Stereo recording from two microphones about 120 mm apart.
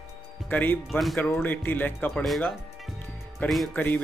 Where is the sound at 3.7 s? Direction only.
15° left (ahead or behind).